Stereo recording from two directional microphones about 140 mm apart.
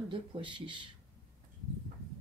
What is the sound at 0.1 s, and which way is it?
Speech, 35° right (ahead or behind).